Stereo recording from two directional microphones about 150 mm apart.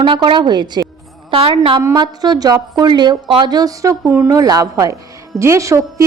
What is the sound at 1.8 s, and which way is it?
A woman's voice, 25° right (ahead or behind).